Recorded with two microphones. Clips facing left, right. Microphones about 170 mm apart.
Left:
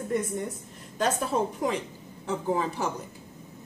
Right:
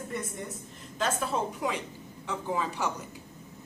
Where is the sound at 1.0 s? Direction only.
45° left (ahead or behind).